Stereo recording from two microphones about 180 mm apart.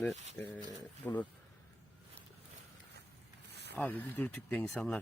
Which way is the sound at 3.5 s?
70° right (ahead or behind).